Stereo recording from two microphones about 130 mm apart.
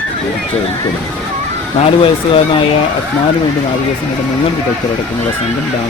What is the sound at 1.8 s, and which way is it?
Speech, 45° left (ahead or behind).